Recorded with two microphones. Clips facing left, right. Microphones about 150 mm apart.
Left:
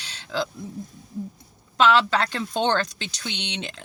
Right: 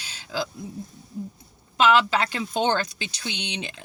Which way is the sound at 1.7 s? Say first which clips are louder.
Even; 5° right (ahead or behind).